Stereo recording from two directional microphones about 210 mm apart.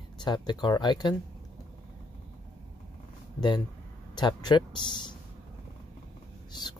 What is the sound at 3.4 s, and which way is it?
Speech, 20° left (ahead or behind).